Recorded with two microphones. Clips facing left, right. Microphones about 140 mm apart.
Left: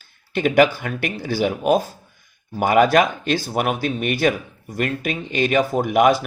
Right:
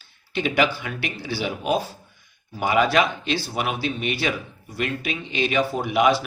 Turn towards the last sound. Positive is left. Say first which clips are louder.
# left 4 dB
turn(degrees=50)  # may be behind; listen again after turning